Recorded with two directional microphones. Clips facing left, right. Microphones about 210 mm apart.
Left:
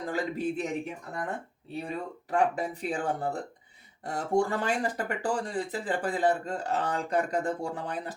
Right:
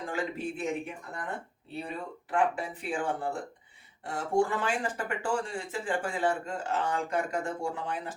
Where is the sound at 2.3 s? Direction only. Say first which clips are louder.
Left 2 dB; 40° left (ahead or behind).